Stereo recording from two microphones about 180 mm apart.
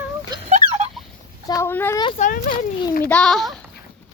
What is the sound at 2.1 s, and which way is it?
Speech, 45° left (ahead or behind).